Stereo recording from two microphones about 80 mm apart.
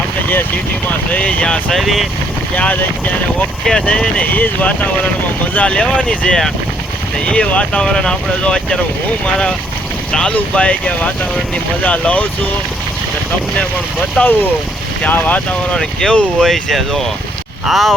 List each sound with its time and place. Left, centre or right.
0.9 s speech: centre
1.7 s speech: centre
3.7 s speech: centre
10.1 s speech: centre
14.2 s speech: centre
15.7 s speech: centre